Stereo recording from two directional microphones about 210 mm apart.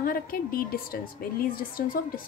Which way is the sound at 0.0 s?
45° left (ahead or behind).